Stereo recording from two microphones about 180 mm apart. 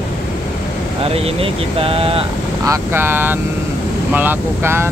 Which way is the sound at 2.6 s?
15° right (ahead or behind).